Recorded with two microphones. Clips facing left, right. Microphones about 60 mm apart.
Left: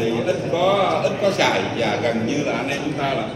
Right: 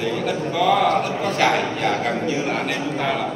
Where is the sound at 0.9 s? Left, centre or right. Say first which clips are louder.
Left 2 dB; right.